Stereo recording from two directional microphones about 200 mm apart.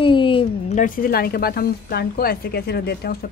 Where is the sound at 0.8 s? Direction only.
45° left (ahead or behind).